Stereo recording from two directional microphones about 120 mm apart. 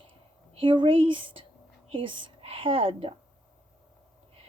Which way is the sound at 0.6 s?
45° right (ahead or behind).